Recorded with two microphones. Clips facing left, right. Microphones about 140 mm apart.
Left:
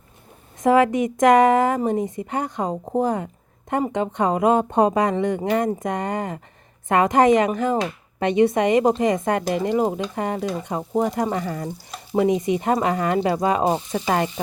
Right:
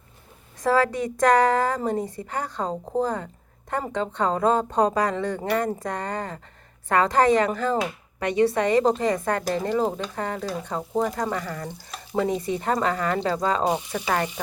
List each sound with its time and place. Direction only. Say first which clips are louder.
0.6 s a woman's voice: left 5 dB; 20° left (ahead or behind)